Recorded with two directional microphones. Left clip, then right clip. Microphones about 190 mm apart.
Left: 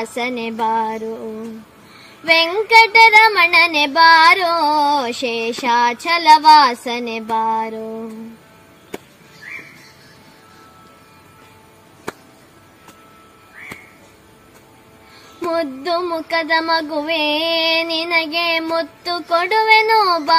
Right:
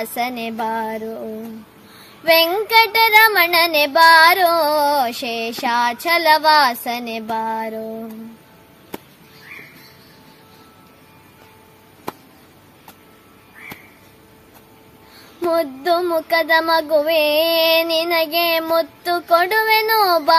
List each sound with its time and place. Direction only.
0.0 s child singing: 30° right (ahead or behind)
2.2 s child singing: 30° right (ahead or behind)
15.5 s child singing: 30° right (ahead or behind)